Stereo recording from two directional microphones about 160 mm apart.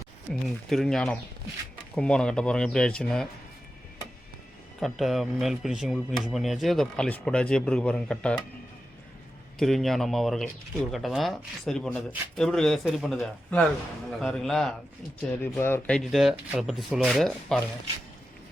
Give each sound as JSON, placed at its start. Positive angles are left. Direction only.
{"t": 0.4, "sound": "speech", "side_deg": 0}
{"t": 4.8, "sound": "speech", "side_deg": 0}
{"t": 9.6, "sound": "speech", "side_deg": 0}
{"t": 15.3, "sound": "speech", "side_deg": 15}
{"t": 16.0, "sound": "speech", "side_deg": 0}